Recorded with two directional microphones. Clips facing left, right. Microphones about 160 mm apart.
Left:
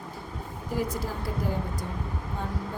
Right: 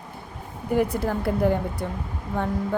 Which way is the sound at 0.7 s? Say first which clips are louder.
Right 8 dB; 60° right (ahead or behind).